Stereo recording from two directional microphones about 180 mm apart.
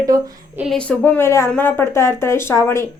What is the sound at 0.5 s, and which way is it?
Speech, centre (ahead or behind).